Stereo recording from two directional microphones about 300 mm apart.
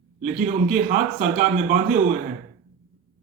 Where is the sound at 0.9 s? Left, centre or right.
Right.